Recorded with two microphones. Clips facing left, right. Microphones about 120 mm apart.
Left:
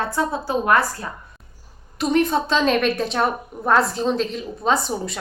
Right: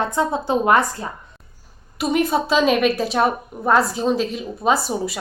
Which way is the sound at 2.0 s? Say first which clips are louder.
Even; 10° right (ahead or behind).